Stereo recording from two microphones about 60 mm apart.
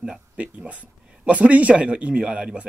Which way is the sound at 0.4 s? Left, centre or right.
Right.